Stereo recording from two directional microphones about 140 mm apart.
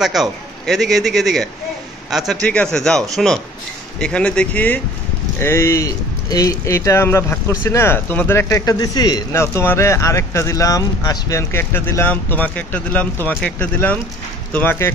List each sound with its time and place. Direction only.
0.0 s a man's voice: centre (ahead or behind); by 9.2 s 30° left (ahead or behind)
9.3 s a man's voice: 20° left (ahead or behind)